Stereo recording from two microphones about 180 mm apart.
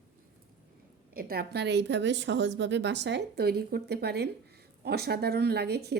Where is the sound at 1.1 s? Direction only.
55° right (ahead or behind).